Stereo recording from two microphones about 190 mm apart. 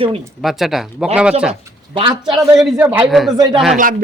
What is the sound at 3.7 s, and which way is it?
Speech, 45° right (ahead or behind).